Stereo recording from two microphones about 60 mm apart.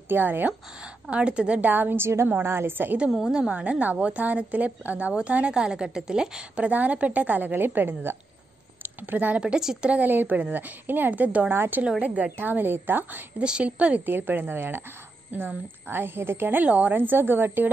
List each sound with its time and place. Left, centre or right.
0.1 s a woman's voice: right
1.1 s a woman's voice: centre; by 3.0 s right
3.1 s a woman's voice: centre
3.3 s a woman's voice: centre
9.4 s a woman's voice: centre
10.0 s a woman's voice: right
11.5 s a woman's voice: right
12.0 s a woman's voice: right
13.4 s a woman's voice: centre
14.0 s a woman's voice: right
16.6 s a woman's voice: right